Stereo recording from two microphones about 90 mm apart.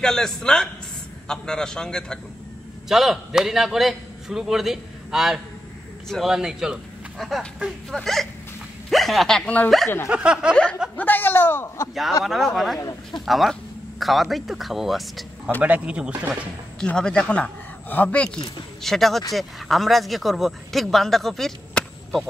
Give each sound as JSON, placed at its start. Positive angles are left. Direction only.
{"t": 0.0, "sound": "speech", "side_deg": 5}
{"t": 2.9, "sound": "a man's voice", "side_deg": -5}
{"t": 10.0, "sound": "speech", "side_deg": -10}
{"t": 10.5, "sound": "speech", "side_deg": 10}
{"t": 11.9, "sound": "speech", "side_deg": 0}
{"t": 15.6, "sound": "speech", "side_deg": -15}
{"t": 16.8, "sound": "speech", "side_deg": 10}
{"t": 18.8, "sound": "speech", "side_deg": 0}